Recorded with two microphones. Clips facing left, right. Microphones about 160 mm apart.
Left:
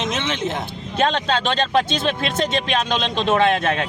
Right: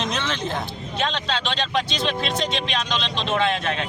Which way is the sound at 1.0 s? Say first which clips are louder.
Left 6 dB; 50° left (ahead or behind).